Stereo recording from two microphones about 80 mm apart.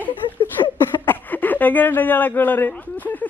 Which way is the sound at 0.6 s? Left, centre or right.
Left.